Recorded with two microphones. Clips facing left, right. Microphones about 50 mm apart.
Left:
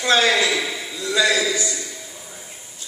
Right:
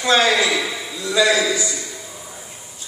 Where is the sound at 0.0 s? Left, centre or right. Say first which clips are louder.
Right 1 dB; right.